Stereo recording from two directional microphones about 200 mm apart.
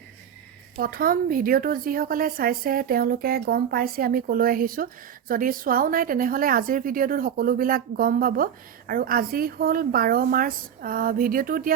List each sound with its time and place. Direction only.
0.8 s a woman's voice: 45° right (ahead or behind)